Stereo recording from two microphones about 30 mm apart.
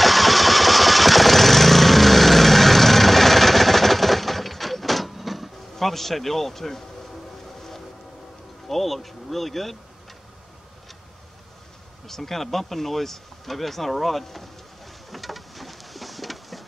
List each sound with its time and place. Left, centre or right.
0.0 s vehicle: centre
8.6 s speech: centre
12.1 s speech: centre
15.0 s a sound: centre